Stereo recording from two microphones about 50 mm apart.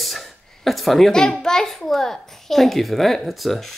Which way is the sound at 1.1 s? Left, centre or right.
Centre.